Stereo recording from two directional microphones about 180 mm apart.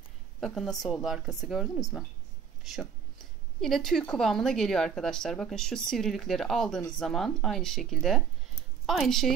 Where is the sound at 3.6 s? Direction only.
Centre (ahead or behind).